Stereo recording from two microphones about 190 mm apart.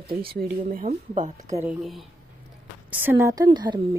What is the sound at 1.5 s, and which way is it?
Speech, 10° right (ahead or behind).